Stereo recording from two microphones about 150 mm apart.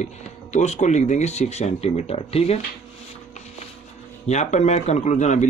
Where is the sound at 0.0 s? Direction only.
50° left (ahead or behind).